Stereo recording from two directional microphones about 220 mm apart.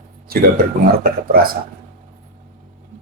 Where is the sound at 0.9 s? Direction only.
40° right (ahead or behind).